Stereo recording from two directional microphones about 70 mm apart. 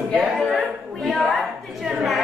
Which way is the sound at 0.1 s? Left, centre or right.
Centre.